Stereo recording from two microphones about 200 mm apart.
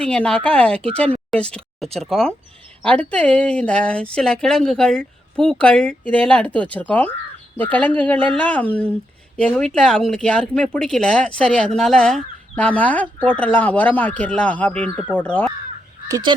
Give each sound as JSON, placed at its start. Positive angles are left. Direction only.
{"t": 0.0, "sound": "speech", "side_deg": 5}
{"t": 16.0, "sound": "speech", "side_deg": -20}